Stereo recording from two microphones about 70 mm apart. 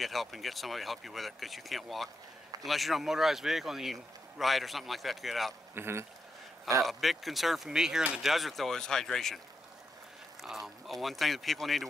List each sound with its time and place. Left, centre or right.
0.0 s speech: centre
5.8 s speech: right
6.8 s speech: centre
10.4 s speech: centre